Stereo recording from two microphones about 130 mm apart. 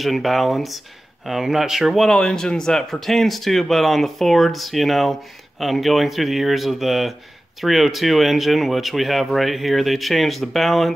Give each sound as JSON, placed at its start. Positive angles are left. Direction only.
{"t": 0.0, "sound": "speech", "side_deg": 0}